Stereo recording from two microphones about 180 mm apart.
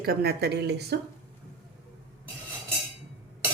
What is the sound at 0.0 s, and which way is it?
Speech, 60° right (ahead or behind).